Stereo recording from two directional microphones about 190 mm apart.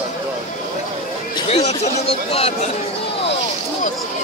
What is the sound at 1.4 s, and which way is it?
Speech, 35° left (ahead or behind).